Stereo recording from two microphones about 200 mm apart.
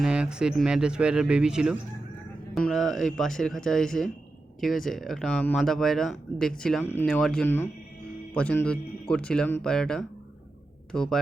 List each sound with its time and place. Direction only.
0.0 s speech: 5° right (ahead or behind)